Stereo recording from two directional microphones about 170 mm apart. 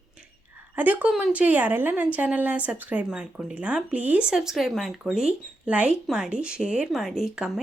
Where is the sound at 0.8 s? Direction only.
10° right (ahead or behind).